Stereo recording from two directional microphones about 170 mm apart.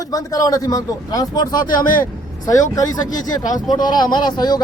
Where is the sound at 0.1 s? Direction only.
20° left (ahead or behind).